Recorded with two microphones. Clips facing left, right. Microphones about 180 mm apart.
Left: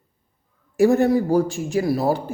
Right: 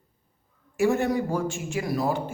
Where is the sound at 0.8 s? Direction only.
35° left (ahead or behind).